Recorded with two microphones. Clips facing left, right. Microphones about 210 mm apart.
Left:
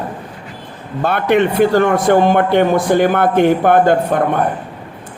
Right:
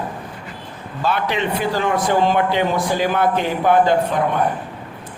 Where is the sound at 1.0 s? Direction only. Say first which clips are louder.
Left 7 dB; 55° left (ahead or behind).